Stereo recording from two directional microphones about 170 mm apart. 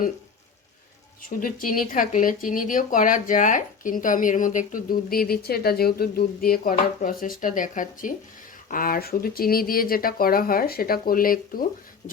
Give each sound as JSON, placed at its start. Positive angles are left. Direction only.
{"t": 1.4, "sound": "speech", "side_deg": 55}